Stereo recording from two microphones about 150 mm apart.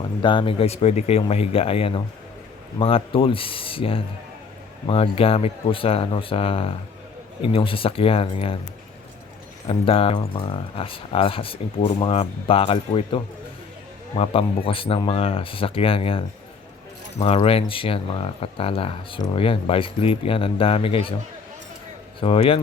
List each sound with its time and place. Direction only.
0.2 s speech: 35° left (ahead or behind)
9.6 s speech: 40° left (ahead or behind)
14.2 s speech: 40° left (ahead or behind)
22.2 s speech: 35° left (ahead or behind)